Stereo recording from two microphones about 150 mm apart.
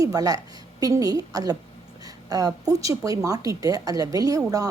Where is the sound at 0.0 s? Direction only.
25° right (ahead or behind).